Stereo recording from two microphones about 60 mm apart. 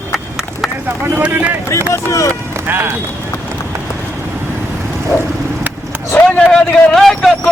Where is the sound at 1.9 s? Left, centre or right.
Left.